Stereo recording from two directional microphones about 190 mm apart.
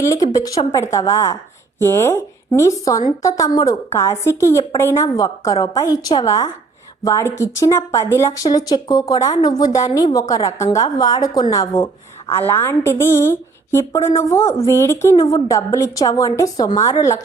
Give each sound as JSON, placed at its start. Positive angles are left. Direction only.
{"t": 0.0, "sound": "a woman's voice", "side_deg": 15}